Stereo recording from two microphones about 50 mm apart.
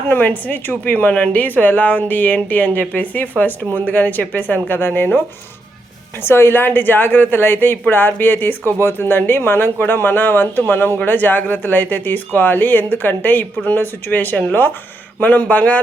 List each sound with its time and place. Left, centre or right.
0.1 s speech: left
6.2 s a woman's voice: left